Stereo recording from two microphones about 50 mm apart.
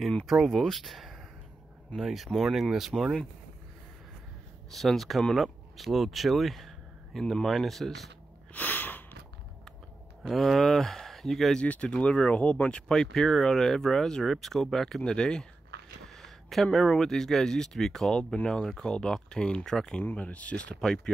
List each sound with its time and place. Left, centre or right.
0.3 s speech: centre
4.6 s speech: centre
8.5 s a sound: left
10.2 s speech: centre
11.6 s speech: left
16.2 s a sound: centre
16.9 s speech: centre
18.3 s speech: left
20.0 s speech: left
20.8 s speech: centre